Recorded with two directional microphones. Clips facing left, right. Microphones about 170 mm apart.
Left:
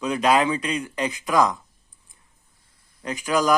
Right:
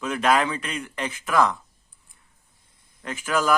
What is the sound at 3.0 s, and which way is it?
Speech, 15° left (ahead or behind).